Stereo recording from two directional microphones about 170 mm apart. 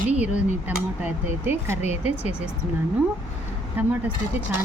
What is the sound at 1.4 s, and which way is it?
Speech, 10° right (ahead or behind).